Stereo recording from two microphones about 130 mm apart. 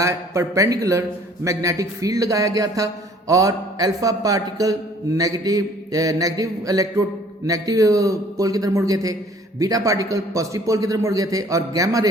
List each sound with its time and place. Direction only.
0.0 s a man's voice: 25° right (ahead or behind)